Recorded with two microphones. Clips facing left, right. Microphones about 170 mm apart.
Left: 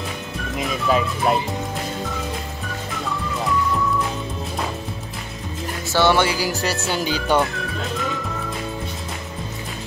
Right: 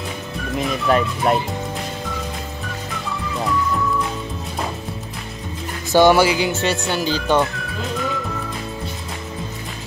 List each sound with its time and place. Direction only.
0.6 s speech: centre (ahead or behind)
5.9 s speech: 15° right (ahead or behind)
6.2 s speech: centre (ahead or behind)
7.0 s speech: 10° left (ahead or behind)